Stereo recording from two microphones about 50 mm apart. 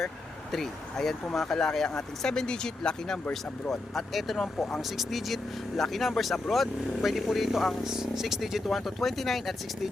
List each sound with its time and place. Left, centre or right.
0.5 s speech: centre
3.7 s speech: centre